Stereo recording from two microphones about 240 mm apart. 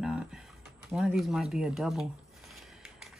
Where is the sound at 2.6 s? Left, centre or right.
Centre.